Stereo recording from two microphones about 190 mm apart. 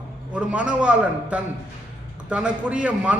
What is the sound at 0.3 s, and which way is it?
A man's voice, 5° right (ahead or behind).